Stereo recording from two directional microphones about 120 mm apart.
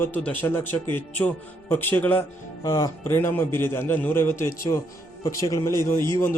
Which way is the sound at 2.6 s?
30° left (ahead or behind).